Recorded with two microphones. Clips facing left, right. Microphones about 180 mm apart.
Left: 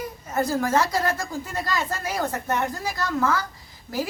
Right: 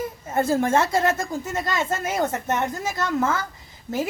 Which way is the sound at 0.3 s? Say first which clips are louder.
Right 3 dB; 25° right (ahead or behind).